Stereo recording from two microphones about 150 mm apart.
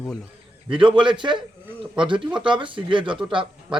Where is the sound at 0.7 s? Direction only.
35° right (ahead or behind).